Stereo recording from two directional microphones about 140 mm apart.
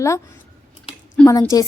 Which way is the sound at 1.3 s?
25° left (ahead or behind).